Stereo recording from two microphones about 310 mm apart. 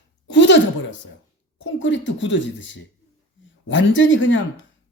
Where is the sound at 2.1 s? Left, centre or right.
Left.